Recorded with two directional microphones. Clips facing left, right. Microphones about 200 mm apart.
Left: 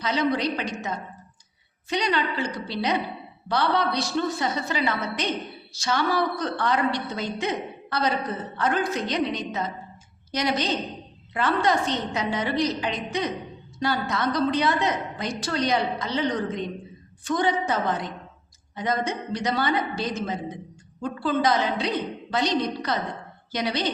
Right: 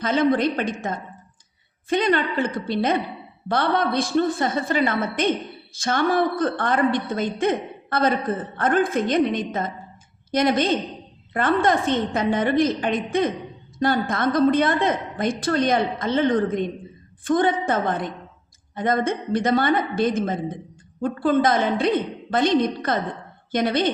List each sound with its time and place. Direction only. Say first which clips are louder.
0.0 s a woman's voice: right 5 dB; 50° right (ahead or behind)